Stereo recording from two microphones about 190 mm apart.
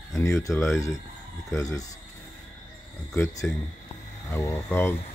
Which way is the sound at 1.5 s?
15° left (ahead or behind).